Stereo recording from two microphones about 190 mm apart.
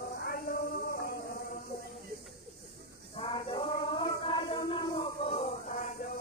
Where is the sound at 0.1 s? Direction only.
50° left (ahead or behind).